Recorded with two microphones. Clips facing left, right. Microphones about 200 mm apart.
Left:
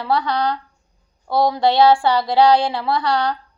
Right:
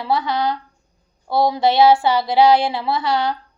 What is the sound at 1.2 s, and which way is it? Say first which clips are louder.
Speech: even; 5° right (ahead or behind).